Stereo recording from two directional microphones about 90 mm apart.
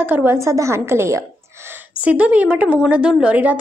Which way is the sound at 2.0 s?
15° right (ahead or behind).